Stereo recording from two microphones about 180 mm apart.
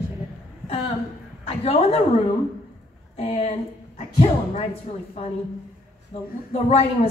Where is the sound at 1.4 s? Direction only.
35° left (ahead or behind).